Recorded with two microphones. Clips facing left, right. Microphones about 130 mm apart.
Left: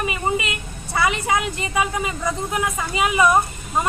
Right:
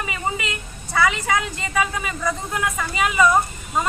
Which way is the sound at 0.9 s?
20° left (ahead or behind).